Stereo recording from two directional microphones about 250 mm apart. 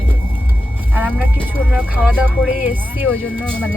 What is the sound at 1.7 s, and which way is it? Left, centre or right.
Speech, centre.